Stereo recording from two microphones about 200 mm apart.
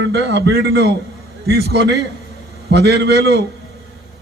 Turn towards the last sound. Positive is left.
turn(degrees=-55)  # may be behind; listen again after turning